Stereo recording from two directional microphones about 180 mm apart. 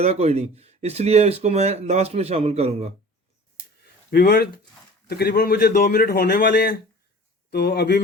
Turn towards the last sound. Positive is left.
turn(degrees=60)  # may be behind; listen again after turning